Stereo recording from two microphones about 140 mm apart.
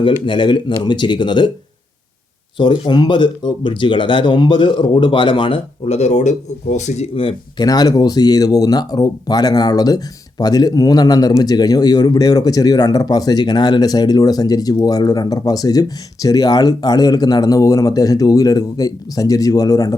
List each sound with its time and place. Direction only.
0.0 s speech: 35° left (ahead or behind)
2.6 s speech: 35° left (ahead or behind); by 7.1 s 55° left (ahead or behind)
7.6 s speech: 25° left (ahead or behind)